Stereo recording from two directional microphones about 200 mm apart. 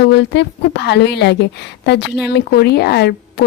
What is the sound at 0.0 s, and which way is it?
A woman's voice, 60° left (ahead or behind).